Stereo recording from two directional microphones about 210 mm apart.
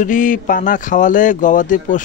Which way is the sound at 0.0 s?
40° left (ahead or behind).